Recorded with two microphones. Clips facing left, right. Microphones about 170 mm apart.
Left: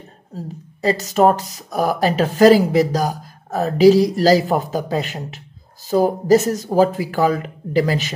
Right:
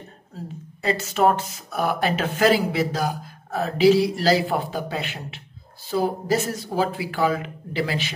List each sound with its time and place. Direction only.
0.8 s speech: 40° left (ahead or behind)